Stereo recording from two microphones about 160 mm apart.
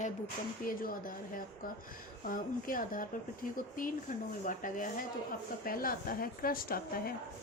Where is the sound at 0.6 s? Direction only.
60° left (ahead or behind).